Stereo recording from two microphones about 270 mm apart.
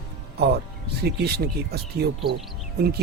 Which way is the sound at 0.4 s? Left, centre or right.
Right.